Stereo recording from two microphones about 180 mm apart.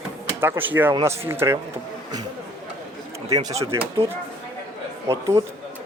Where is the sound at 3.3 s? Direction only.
20° right (ahead or behind).